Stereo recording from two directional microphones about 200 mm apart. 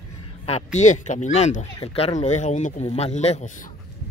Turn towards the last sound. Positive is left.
turn(degrees=35)  # may be behind; listen again after turning